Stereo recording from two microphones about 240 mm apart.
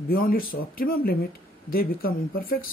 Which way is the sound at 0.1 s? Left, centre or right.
Left.